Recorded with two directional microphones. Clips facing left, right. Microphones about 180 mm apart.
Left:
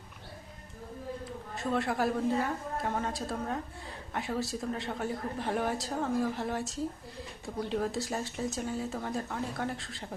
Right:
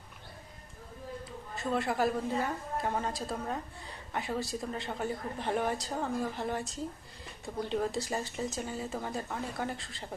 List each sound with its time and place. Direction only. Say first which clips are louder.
1.5 s a woman's voice: even; centre (ahead or behind)